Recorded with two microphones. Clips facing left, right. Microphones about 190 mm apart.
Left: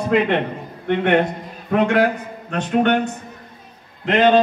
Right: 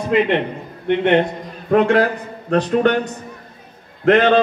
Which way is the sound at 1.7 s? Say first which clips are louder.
Right 2 dB; 35° right (ahead or behind).